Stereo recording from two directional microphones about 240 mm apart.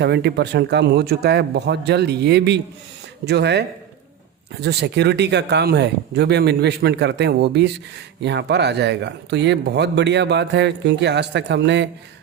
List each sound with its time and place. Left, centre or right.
0.0 s speech: right